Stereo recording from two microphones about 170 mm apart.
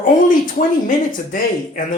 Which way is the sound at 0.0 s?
50° left (ahead or behind).